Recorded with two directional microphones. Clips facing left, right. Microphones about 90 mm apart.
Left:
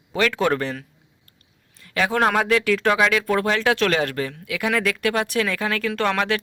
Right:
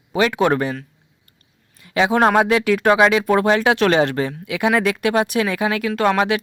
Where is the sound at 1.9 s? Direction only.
15° right (ahead or behind).